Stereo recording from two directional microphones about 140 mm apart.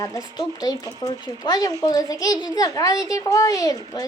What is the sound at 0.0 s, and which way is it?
Speech, 25° left (ahead or behind).